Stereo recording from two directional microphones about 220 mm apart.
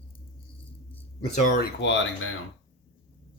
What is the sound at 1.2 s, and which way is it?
Speech, 35° left (ahead or behind).